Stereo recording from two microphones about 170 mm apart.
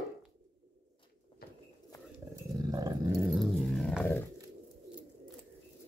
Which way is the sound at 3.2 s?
Centre (ahead or behind).